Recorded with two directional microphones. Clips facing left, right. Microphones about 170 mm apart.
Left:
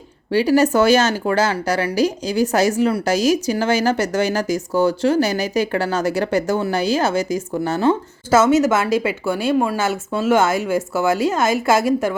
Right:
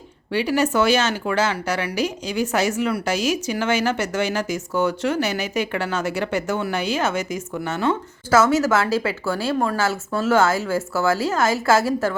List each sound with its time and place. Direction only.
0.3 s speech: 40° left (ahead or behind); by 12.1 s 15° left (ahead or behind)